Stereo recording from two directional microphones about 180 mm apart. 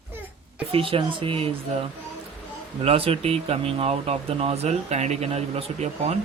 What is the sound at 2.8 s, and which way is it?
Speech, 30° right (ahead or behind).